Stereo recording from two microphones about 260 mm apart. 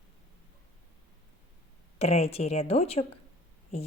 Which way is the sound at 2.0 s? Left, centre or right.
Left.